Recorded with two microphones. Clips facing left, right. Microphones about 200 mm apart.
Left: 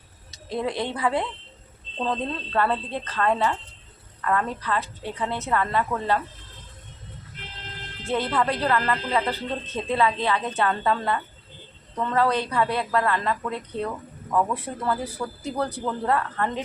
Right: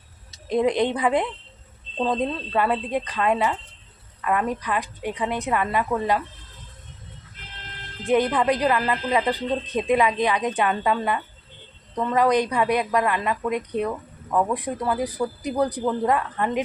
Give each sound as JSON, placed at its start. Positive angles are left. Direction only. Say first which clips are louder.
{"t": 0.4, "sound": "a woman's voice", "louder": "right 7 dB", "side_deg": -20}
{"t": 8.0, "sound": "speech", "louder": "right 5 dB", "side_deg": -15}